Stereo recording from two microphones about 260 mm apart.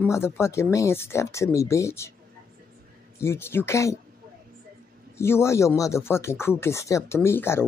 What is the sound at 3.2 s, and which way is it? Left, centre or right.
Speech, centre.